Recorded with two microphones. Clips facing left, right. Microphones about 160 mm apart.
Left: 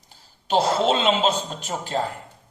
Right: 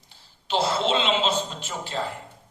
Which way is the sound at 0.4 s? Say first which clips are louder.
Left 4 dB; 45° left (ahead or behind).